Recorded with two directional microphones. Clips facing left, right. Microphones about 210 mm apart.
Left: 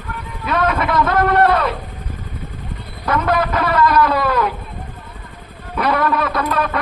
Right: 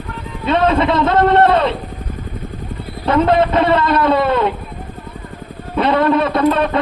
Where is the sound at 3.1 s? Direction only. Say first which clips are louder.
Right 5 dB; 25° right (ahead or behind).